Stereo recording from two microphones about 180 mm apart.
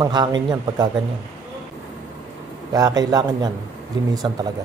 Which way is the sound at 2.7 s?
20° right (ahead or behind).